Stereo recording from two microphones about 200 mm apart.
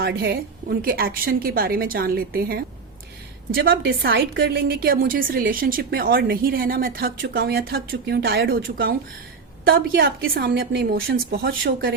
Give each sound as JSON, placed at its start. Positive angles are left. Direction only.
{"t": 0.0, "sound": "a woman's voice", "side_deg": -50}